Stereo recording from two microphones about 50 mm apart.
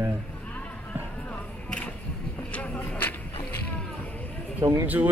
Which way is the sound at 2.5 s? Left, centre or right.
Left.